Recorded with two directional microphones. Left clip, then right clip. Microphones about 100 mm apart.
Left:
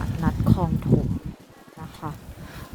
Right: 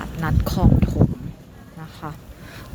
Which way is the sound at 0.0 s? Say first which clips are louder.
Right 2 dB; 5° right (ahead or behind).